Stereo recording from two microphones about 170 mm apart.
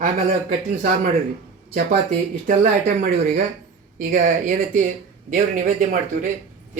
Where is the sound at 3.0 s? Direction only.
50° right (ahead or behind).